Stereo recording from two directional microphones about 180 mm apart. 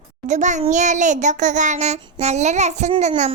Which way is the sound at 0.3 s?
40° right (ahead or behind).